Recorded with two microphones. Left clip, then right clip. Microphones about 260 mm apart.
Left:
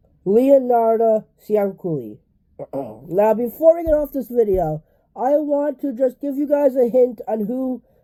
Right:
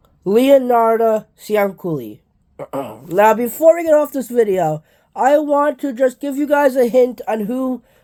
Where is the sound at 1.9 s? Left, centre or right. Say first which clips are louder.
Right 2 dB; centre.